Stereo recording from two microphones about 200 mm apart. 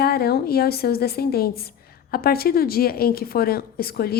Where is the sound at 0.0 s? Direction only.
50° left (ahead or behind).